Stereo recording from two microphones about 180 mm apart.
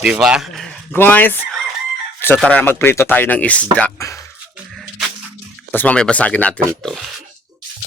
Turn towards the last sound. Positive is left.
turn(degrees=5)  # may be behind; listen again after turning